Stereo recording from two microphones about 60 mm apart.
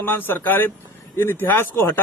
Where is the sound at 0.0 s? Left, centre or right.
Left.